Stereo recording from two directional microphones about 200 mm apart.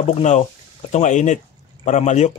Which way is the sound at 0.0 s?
35° left (ahead or behind).